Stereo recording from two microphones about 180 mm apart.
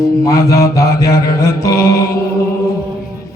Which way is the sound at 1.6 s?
15° left (ahead or behind).